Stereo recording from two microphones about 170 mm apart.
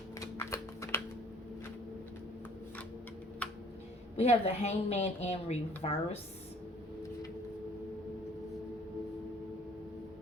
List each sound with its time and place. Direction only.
0.2 s typing: 15° left (ahead or behind)
4.2 s a woman's voice: 35° left (ahead or behind)